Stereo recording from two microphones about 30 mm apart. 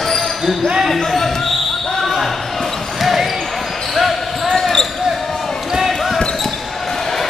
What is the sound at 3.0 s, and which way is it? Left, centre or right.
Basketball bounce, centre.